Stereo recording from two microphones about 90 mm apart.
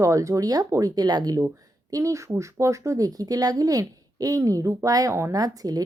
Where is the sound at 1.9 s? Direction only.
35° right (ahead or behind).